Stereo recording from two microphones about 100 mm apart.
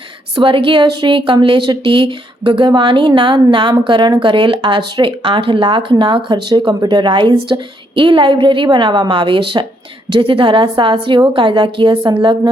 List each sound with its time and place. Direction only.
0.3 s a woman's voice: 55° right (ahead or behind)